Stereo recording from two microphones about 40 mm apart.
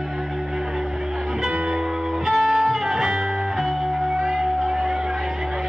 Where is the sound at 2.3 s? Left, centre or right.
Centre.